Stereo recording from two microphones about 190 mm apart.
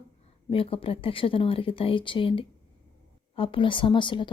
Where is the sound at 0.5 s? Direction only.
30° left (ahead or behind).